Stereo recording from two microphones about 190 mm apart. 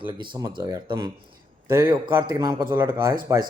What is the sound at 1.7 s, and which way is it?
A man's voice, 15° right (ahead or behind).